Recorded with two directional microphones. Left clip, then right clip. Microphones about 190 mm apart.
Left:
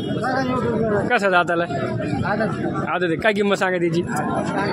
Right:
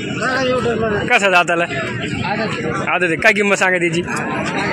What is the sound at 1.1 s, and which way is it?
Speech, centre (ahead or behind).